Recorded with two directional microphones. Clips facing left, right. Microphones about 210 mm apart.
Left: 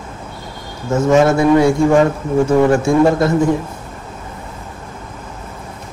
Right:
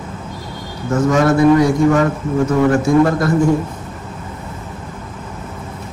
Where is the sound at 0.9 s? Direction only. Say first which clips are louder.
Left 2 dB; 25° left (ahead or behind).